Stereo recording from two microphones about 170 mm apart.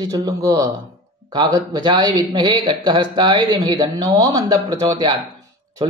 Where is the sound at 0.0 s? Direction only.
20° right (ahead or behind).